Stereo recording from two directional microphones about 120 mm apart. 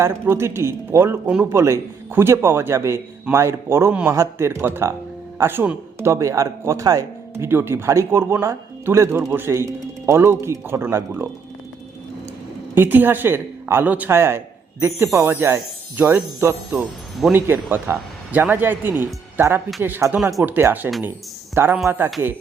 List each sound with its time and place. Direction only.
0.0 s speech: 20° right (ahead or behind)
12.7 s speech: 15° right (ahead or behind)
16.8 s speech: centre (ahead or behind)
17.3 s a man's voice: 15° right (ahead or behind)